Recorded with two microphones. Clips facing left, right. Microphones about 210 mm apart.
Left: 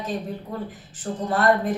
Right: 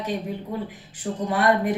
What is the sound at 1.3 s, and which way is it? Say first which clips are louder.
Speech: left 1 dB; 10° right (ahead or behind).